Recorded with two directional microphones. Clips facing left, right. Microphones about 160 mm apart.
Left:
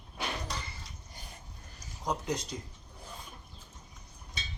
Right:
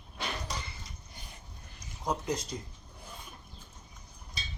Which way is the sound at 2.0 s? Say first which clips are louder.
Right 1 dB; 5° right (ahead or behind).